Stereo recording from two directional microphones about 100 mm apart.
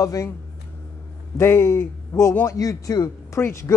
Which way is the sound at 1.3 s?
25° left (ahead or behind).